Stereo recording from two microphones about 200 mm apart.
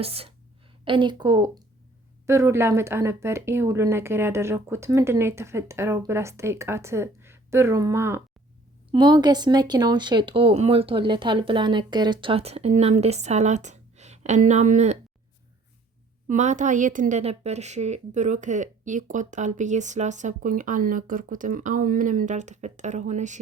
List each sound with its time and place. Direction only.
0.0 s a woman's voice: 30° right (ahead or behind)
16.3 s a woman's voice: 40° right (ahead or behind)